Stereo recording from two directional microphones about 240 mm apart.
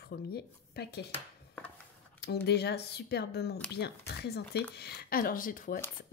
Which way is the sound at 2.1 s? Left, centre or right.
Left.